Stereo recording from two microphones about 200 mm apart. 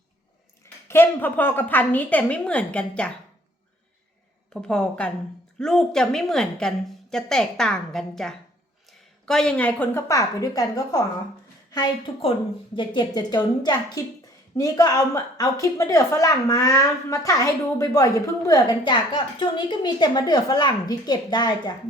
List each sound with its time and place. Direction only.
0.9 s a woman's voice: 10° left (ahead or behind)
4.5 s a woman's voice: 5° left (ahead or behind); by 21.7 s 20° left (ahead or behind)